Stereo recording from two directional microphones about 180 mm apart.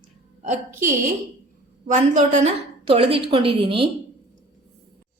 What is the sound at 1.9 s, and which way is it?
A woman's voice, 40° right (ahead or behind).